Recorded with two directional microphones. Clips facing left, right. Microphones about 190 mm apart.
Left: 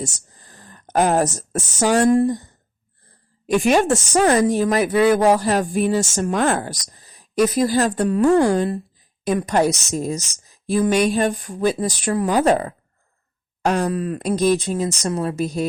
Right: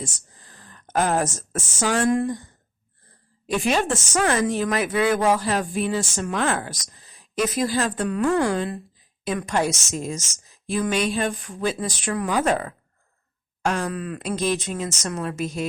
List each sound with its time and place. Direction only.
0.0 s a sound: 40° left (ahead or behind)
0.9 s speech: 40° left (ahead or behind)
3.4 s a woman's voice: 50° left (ahead or behind)